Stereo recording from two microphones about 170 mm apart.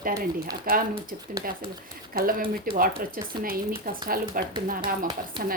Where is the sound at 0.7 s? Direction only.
60° right (ahead or behind).